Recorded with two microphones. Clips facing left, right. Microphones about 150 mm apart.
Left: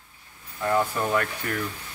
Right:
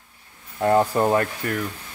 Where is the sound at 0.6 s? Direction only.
40° right (ahead or behind).